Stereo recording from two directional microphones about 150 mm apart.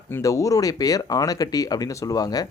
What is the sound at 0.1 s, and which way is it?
Speech, 20° left (ahead or behind).